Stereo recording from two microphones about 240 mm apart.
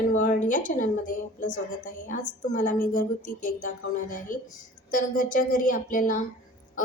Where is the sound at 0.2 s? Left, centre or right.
Left.